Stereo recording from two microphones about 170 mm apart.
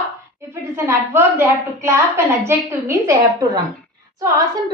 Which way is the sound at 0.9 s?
15° right (ahead or behind).